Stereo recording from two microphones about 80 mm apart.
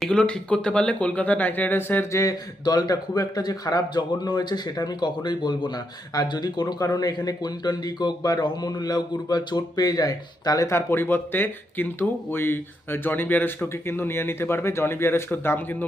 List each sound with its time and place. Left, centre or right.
0.0 s speech: centre
2.1 s speech: left
10.7 s speech: left